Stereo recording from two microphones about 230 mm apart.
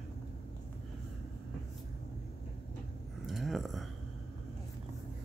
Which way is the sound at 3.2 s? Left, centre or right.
Centre.